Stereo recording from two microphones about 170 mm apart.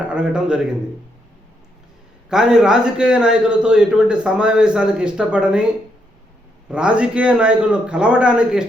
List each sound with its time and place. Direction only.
0.1 s a man's voice: 5° right (ahead or behind)
2.3 s a man's voice: 5° right (ahead or behind)
6.7 s a man's voice: 5° right (ahead or behind)